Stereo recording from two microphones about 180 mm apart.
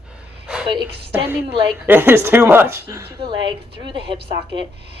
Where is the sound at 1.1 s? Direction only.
10° right (ahead or behind).